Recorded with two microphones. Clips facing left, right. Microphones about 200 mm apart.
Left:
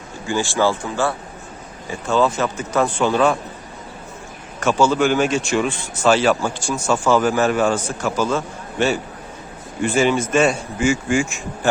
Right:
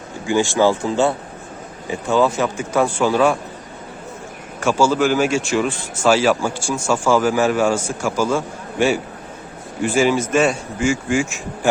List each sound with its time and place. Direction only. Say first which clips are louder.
0.3 s speech: right 3 dB; 15° right (ahead or behind)
4.6 s a man's voice: even; 5° right (ahead or behind)